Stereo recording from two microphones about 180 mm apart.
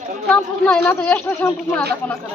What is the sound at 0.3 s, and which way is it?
Speech, 5° left (ahead or behind).